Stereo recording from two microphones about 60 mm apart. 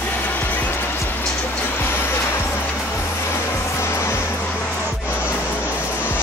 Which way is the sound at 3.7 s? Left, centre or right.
Left.